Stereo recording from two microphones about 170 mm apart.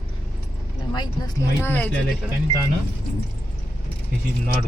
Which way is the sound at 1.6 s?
10° left (ahead or behind).